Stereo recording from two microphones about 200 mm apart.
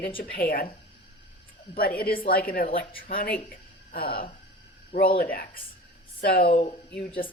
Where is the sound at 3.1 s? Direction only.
45° left (ahead or behind).